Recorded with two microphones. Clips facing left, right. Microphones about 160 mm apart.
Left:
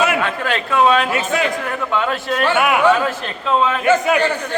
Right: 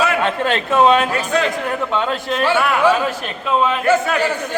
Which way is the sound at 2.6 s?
15° left (ahead or behind).